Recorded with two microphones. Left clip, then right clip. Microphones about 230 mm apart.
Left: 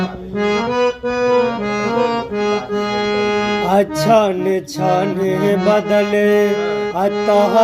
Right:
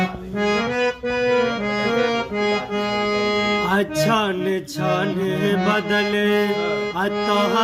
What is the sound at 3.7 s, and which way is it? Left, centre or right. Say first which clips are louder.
Music: left 11 dB; centre.